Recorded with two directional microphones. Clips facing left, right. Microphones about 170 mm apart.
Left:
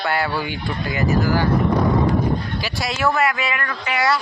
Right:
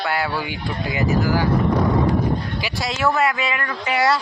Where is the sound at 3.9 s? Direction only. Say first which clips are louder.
Right 2 dB; 35° right (ahead or behind).